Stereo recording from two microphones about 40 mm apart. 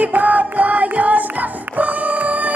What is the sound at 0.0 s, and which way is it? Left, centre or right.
Music, right.